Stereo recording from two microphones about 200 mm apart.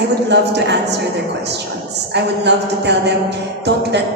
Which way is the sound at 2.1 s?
55° right (ahead or behind).